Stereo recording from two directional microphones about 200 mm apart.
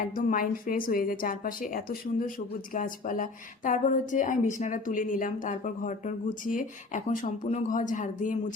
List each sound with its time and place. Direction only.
0.3 s a woman's voice: 45° left (ahead or behind)